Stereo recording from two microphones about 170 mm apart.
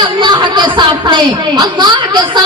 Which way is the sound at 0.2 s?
25° right (ahead or behind).